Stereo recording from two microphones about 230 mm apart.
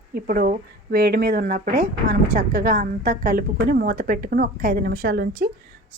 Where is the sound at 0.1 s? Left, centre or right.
Right.